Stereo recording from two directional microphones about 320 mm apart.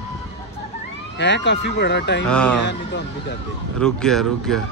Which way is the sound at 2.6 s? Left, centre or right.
Left.